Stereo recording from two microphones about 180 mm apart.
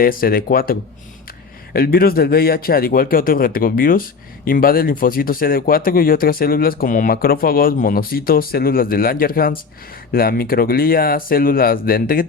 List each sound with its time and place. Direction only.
0.0 s a man's voice: 55° left (ahead or behind)